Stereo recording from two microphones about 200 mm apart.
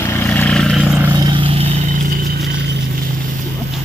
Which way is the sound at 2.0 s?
45° right (ahead or behind).